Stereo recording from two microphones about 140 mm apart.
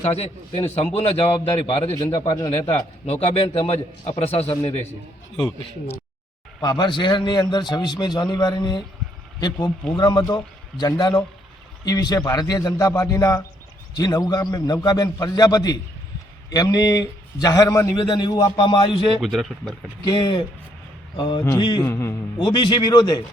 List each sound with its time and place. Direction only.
0.0 s a man's voice: 45° left (ahead or behind)
1.6 s a man's voice: 40° left (ahead or behind)
6.6 s a man's voice: 30° left (ahead or behind)
19.2 s speech: centre (ahead or behind)
20.1 s a man's voice: 30° left (ahead or behind)
21.8 s a man's voice: 20° left (ahead or behind)
22.4 s a man's voice: 35° left (ahead or behind)